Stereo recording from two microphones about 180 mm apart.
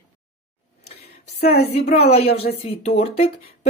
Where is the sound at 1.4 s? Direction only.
60° left (ahead or behind).